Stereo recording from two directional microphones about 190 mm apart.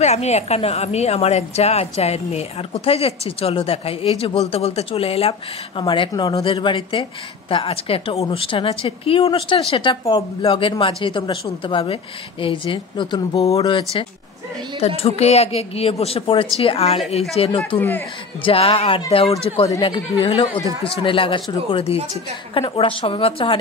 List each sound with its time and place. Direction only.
0.0 s a woman's voice: 35° left (ahead or behind)
17.7 s speech: 10° left (ahead or behind)
18.4 s a woman's voice: 30° left (ahead or behind)